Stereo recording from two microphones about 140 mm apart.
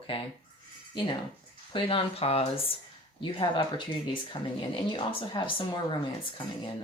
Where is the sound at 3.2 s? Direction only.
35° left (ahead or behind).